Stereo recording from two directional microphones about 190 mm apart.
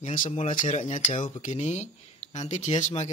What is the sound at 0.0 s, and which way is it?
A man's voice, 40° left (ahead or behind).